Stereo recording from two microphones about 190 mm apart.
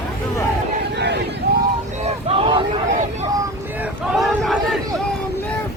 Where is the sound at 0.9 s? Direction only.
65° right (ahead or behind).